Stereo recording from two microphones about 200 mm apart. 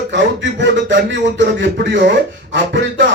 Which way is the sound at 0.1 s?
65° right (ahead or behind).